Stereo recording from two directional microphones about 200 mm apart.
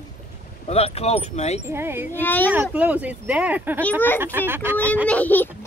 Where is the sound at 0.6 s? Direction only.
30° left (ahead or behind).